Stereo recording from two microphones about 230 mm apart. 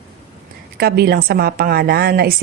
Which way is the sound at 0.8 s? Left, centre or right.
Right.